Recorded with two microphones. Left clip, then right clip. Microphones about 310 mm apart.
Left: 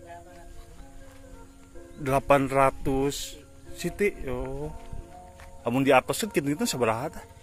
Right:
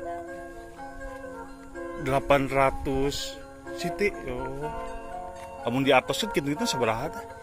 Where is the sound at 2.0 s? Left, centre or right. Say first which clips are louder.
Left 1 dB; centre.